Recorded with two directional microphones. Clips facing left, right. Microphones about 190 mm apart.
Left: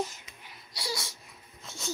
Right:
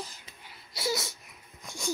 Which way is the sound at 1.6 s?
15° right (ahead or behind).